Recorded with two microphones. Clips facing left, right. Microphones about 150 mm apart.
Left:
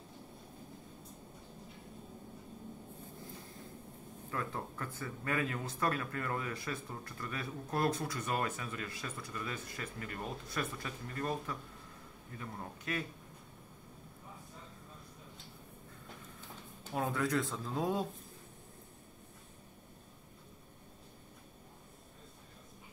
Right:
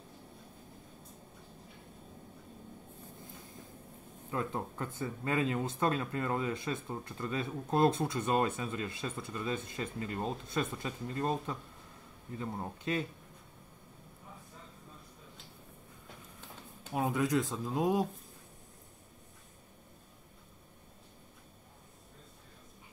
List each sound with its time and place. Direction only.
4.3 s speech: 20° right (ahead or behind)
16.9 s speech: 15° right (ahead or behind)